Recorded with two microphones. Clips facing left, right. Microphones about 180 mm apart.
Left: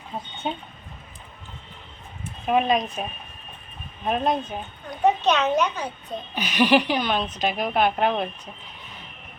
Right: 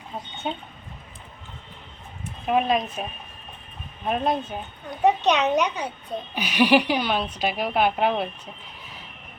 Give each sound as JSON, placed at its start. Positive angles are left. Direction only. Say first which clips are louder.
{"t": 0.4, "sound": "speech", "louder": "left 1 dB", "side_deg": 0}
{"t": 2.5, "sound": "speech", "louder": "left 1 dB", "side_deg": 0}
{"t": 5.0, "sound": "a woman's voice", "louder": "even", "side_deg": -15}